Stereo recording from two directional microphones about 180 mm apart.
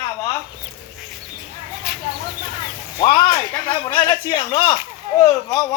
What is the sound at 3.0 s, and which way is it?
A man's voice, 20° left (ahead or behind).